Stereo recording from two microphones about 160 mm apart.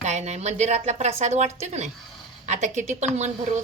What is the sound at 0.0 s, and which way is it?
A woman's voice, 45° right (ahead or behind).